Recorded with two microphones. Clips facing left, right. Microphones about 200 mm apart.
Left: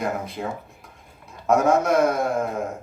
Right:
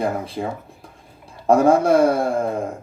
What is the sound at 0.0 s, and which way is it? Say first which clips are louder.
Speech: right 4 dB; 30° right (ahead or behind).